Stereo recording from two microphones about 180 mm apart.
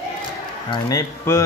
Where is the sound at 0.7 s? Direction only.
20° left (ahead or behind).